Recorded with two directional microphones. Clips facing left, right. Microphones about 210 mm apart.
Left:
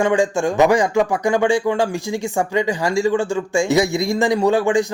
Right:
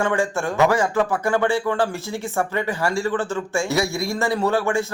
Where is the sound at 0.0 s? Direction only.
15° left (ahead or behind).